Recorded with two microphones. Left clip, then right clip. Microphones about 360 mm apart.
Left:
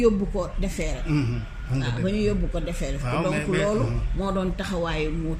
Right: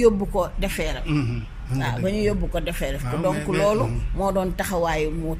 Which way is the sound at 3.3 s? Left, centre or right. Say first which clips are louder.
Even; centre.